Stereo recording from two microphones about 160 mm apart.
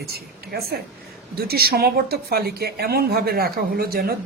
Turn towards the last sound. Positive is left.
turn(degrees=-70)  # may be behind; listen again after turning